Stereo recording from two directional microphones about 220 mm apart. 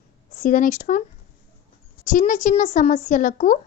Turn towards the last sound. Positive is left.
turn(degrees=35)  # may be behind; listen again after turning